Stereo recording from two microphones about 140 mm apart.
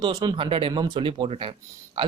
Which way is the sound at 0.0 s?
30° right (ahead or behind).